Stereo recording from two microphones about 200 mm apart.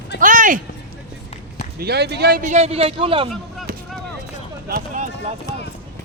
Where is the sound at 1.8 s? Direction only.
55° right (ahead or behind); by 3.3 s 25° right (ahead or behind).